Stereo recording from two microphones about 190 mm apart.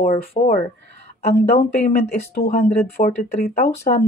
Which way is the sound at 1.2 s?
55° left (ahead or behind).